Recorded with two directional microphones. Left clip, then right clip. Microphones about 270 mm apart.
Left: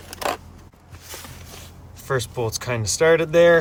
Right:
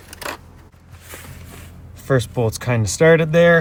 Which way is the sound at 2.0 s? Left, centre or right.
Centre.